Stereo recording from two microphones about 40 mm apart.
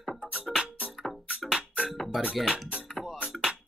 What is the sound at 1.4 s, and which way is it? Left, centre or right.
Music, centre.